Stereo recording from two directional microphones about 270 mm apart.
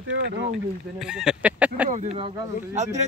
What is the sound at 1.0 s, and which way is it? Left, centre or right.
Speech, centre.